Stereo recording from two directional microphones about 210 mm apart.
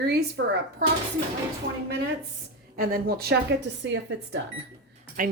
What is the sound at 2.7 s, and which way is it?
A woman's voice, 45° right (ahead or behind).